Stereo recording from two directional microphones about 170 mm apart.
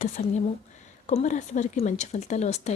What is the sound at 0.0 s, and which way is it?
A woman's voice, 45° left (ahead or behind).